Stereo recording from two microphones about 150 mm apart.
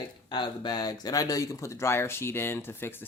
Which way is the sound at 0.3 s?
30° left (ahead or behind).